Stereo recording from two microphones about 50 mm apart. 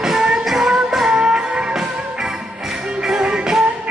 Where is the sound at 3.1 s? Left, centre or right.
Centre.